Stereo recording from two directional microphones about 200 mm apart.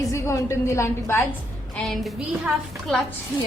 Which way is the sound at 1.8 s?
Centre (ahead or behind).